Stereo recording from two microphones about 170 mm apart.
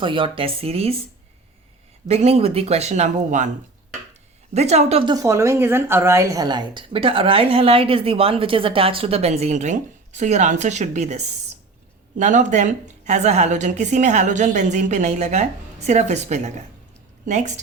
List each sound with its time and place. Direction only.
0.0 s a woman's voice: 30° right (ahead or behind)
2.0 s a woman's voice: 40° right (ahead or behind)
4.5 s a woman's voice: 40° right (ahead or behind)
5.1 s a woman's voice: 20° right (ahead or behind); by 17.6 s 45° right (ahead or behind)